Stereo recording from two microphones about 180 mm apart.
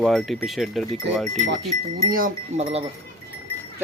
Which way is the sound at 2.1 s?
50° right (ahead or behind).